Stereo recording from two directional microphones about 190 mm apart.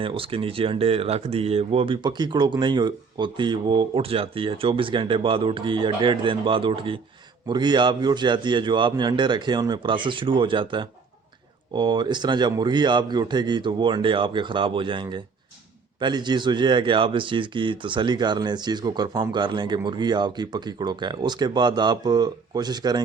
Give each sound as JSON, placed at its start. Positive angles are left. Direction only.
{"t": 0.0, "sound": "speech", "side_deg": -30}